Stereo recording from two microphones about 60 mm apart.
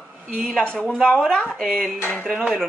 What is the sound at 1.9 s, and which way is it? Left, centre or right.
Speech, left.